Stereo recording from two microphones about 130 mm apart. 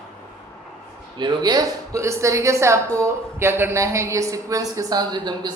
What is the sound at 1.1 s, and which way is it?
A woman's voice, 35° right (ahead or behind).